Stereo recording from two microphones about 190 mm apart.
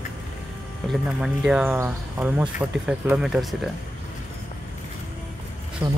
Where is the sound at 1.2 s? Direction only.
5° right (ahead or behind).